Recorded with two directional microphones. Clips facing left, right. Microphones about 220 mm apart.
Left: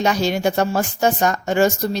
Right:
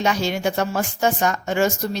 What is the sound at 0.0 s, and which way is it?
A woman's voice, 35° left (ahead or behind).